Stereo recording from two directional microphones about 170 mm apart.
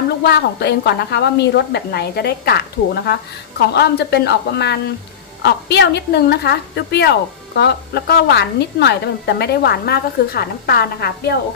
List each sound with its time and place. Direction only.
0.2 s a woman's voice: 75° left (ahead or behind)